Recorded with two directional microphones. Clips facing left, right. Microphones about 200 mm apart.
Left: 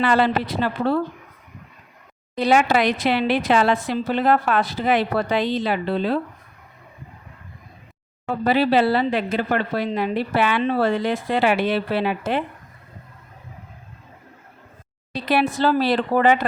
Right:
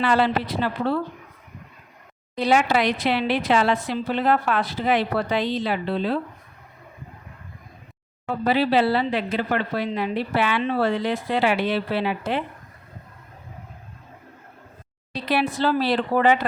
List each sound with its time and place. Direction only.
0.0 s a woman's voice: 50° left (ahead or behind)
2.3 s a woman's voice: 50° left (ahead or behind)
8.4 s a woman's voice: 50° left (ahead or behind)
15.1 s a woman's voice: 50° left (ahead or behind)